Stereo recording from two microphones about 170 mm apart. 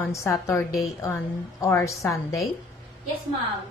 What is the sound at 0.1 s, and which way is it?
A woman's voice, 15° left (ahead or behind).